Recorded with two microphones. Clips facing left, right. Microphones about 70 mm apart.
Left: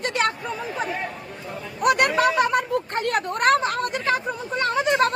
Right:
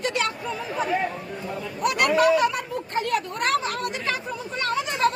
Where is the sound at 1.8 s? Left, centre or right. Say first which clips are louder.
Left 1 dB; left.